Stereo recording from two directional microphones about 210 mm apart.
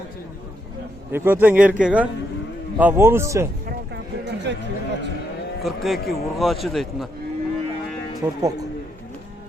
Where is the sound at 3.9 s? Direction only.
55° right (ahead or behind).